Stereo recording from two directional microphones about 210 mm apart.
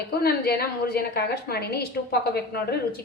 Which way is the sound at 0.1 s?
45° left (ahead or behind).